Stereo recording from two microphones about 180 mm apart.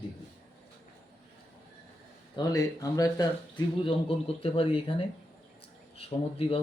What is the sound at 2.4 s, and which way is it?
Speech, 20° left (ahead or behind).